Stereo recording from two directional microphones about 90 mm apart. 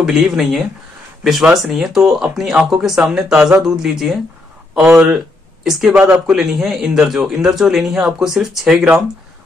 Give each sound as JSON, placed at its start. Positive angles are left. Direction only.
{"t": 0.0, "sound": "speech", "side_deg": -5}
{"t": 5.9, "sound": "speech", "side_deg": -20}
{"t": 6.2, "sound": "speech", "side_deg": -5}